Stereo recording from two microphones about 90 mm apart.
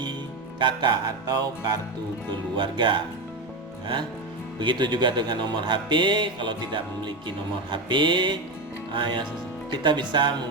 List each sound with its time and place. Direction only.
0.6 s speech: 60° right (ahead or behind)
2.6 s speech: 60° right (ahead or behind)
4.6 s speech: 60° right (ahead or behind)